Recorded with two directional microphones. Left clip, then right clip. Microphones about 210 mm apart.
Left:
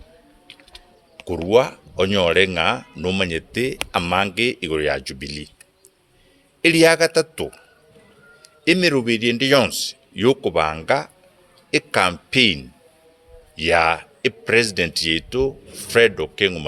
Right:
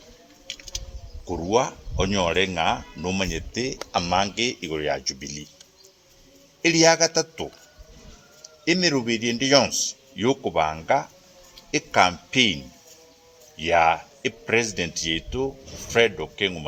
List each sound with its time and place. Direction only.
0.4 s bird: 15° right (ahead or behind)
1.3 s speech: 50° left (ahead or behind)
6.6 s speech: 45° left (ahead or behind)
8.6 s speech: 45° left (ahead or behind)
13.6 s speech: 50° left (ahead or behind)